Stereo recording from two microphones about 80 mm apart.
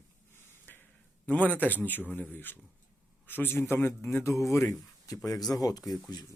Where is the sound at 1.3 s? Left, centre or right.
Left.